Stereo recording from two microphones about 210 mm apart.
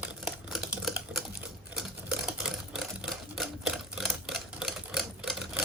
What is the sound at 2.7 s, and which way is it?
Typewriter, centre (ahead or behind).